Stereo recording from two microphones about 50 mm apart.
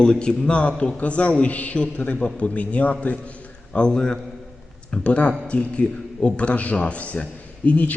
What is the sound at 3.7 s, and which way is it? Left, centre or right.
Speech, centre.